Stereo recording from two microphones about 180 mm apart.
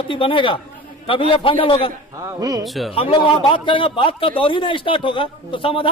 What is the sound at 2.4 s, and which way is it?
Speech, 20° right (ahead or behind).